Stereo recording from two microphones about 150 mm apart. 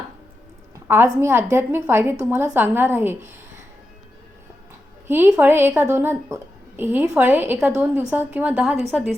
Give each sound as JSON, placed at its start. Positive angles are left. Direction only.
{"t": 0.9, "sound": "a woman's voice", "side_deg": -15}
{"t": 5.0, "sound": "a woman's voice", "side_deg": -15}